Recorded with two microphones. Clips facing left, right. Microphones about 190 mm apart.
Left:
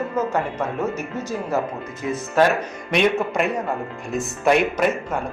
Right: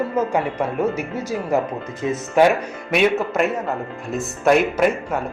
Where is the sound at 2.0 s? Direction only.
25° right (ahead or behind).